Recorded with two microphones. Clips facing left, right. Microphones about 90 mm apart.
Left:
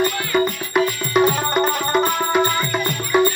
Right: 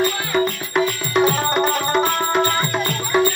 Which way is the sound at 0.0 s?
5° left (ahead or behind).